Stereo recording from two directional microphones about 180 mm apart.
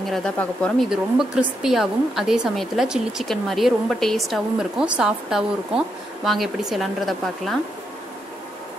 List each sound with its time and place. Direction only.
0.0 s speech: 5° left (ahead or behind)